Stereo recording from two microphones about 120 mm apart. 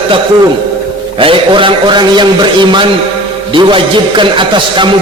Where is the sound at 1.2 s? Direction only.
45° right (ahead or behind).